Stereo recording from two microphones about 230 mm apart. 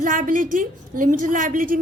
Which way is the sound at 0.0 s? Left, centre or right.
Right.